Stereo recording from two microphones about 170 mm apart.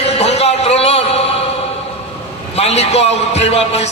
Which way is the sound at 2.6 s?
40° left (ahead or behind).